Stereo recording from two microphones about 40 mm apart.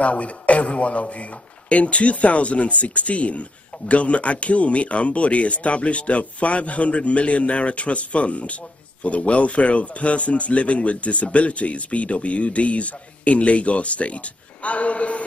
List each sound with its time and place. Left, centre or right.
0.0 s speech: left